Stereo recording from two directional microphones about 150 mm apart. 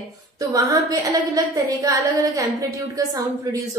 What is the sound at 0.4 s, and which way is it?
A woman's voice, 25° right (ahead or behind).